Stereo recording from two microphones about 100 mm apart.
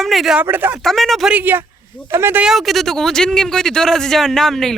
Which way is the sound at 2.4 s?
5° right (ahead or behind).